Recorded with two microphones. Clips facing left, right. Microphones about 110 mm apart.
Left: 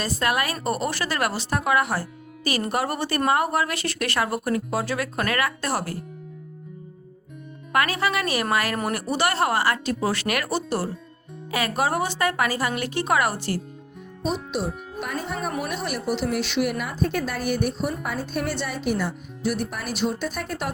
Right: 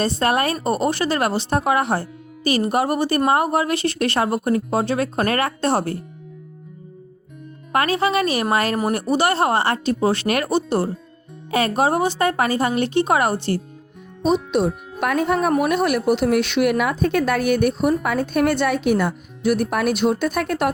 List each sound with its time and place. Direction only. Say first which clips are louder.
0.0 s speech: right 5 dB; 30° right (ahead or behind)
7.7 s speech: right 4 dB; 25° right (ahead or behind)
14.5 s speech: right 8 dB; 70° right (ahead or behind)